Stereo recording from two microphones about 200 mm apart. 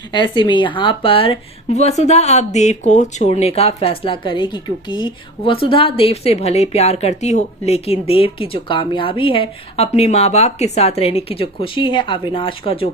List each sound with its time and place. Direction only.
0.1 s a woman's voice: 20° left (ahead or behind)